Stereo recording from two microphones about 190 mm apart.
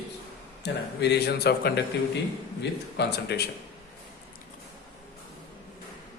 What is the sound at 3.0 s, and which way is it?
Speech, 60° left (ahead or behind).